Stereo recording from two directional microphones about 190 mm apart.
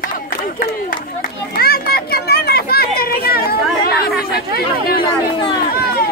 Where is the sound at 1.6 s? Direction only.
55° left (ahead or behind).